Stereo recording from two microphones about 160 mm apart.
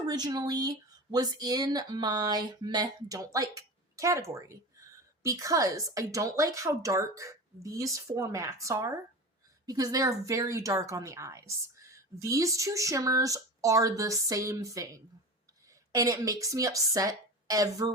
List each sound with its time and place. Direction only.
0.0 s speech: 25° right (ahead or behind)